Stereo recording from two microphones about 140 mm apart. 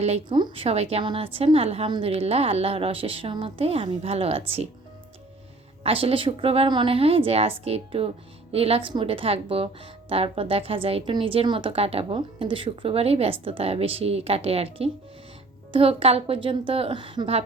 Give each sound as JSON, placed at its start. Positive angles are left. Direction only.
{"t": 0.3, "sound": "a woman's voice", "side_deg": -35}
{"t": 5.8, "sound": "a woman's voice", "side_deg": -40}